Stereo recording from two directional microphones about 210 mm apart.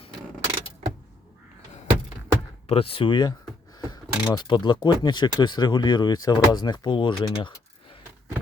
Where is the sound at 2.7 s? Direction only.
25° left (ahead or behind).